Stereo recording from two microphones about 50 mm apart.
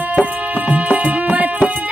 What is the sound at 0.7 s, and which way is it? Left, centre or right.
Music, right.